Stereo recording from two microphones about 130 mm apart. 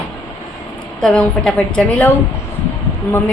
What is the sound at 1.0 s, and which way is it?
A woman's voice, 5° left (ahead or behind).